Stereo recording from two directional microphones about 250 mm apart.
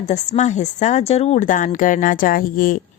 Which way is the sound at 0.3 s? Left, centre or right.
Left.